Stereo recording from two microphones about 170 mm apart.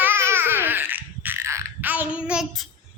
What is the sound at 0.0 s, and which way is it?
Babbling, 15° right (ahead or behind).